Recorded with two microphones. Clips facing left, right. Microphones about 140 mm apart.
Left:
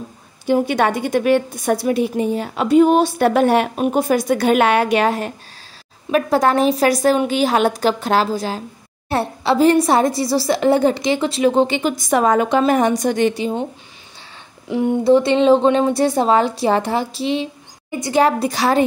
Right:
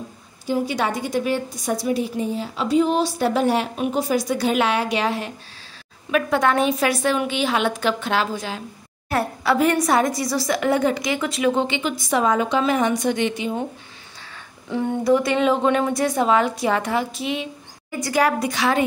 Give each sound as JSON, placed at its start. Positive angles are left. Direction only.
{"t": 0.5, "sound": "a woman's voice", "side_deg": 60}
{"t": 6.1, "sound": "a woman's voice", "side_deg": 35}
{"t": 15.0, "sound": "a woman's voice", "side_deg": 25}